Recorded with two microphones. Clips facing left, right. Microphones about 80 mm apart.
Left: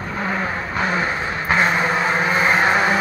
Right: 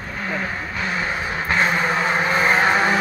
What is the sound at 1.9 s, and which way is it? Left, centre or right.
Vehicle, centre.